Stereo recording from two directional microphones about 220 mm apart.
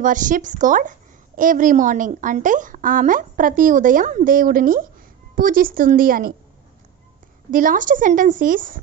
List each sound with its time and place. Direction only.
0.0 s a woman's voice: 35° right (ahead or behind)
7.5 s a woman's voice: 40° right (ahead or behind)